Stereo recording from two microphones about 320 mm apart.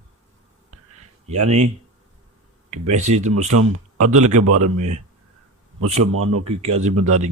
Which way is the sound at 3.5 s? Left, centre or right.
Right.